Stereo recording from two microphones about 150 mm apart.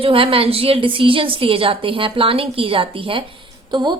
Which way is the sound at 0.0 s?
35° right (ahead or behind).